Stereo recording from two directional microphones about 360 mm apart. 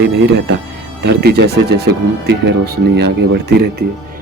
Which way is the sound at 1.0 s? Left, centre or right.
Right.